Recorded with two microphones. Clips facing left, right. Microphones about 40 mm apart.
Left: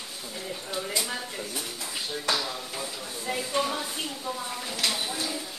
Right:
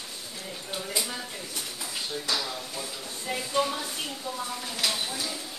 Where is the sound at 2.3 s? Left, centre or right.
Left.